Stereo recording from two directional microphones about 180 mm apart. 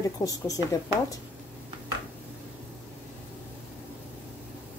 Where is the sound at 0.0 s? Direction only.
20° left (ahead or behind).